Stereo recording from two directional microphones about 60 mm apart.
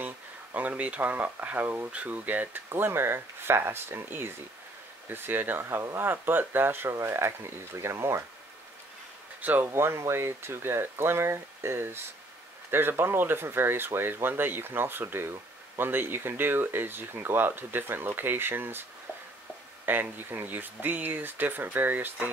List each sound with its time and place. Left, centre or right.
0.0 s speech: right
9.4 s speech: right
9.7 s speech: right
19.9 s speech: right